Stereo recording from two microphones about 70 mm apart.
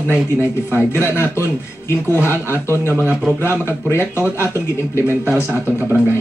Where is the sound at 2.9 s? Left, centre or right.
Right.